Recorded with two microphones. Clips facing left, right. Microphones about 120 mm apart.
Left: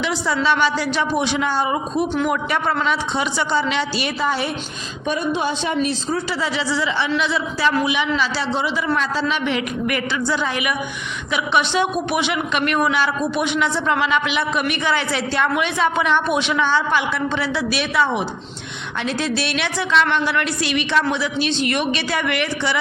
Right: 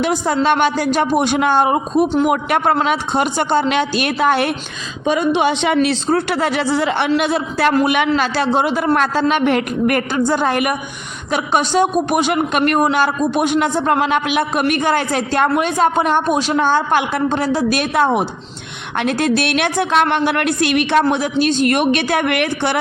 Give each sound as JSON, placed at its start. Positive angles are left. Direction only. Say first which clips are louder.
{"t": 0.0, "sound": "a man's voice", "louder": "right 4 dB", "side_deg": -50}
{"t": 5.0, "sound": "a woman's voice", "louder": "right 6 dB", "side_deg": -90}